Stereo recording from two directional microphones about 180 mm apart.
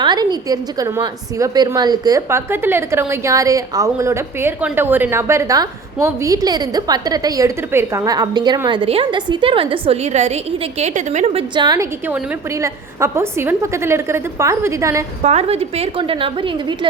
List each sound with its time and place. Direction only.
0.0 s a woman's voice: 25° right (ahead or behind); by 11.4 s 40° right (ahead or behind)
11.5 s a woman's voice: 25° right (ahead or behind)
15.2 s a woman's voice: 35° right (ahead or behind)